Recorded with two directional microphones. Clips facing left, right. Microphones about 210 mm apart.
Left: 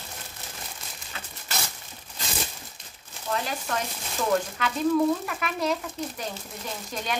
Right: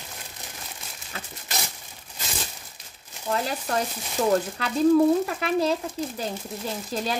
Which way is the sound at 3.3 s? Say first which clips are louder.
Right 3 dB; 35° right (ahead or behind).